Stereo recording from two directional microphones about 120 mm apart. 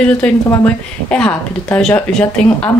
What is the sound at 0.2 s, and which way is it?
Speech, 10° left (ahead or behind).